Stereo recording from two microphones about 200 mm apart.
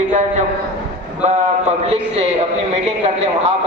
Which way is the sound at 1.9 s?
30° right (ahead or behind).